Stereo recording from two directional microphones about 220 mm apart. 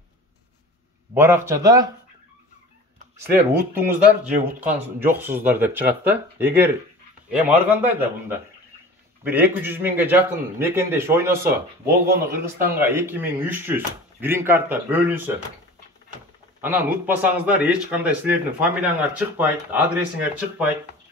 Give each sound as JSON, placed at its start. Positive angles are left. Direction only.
{"t": 1.1, "sound": "a man's voice", "side_deg": -10}
{"t": 3.3, "sound": "a man's voice", "side_deg": -10}
{"t": 16.6, "sound": "a man's voice", "side_deg": -10}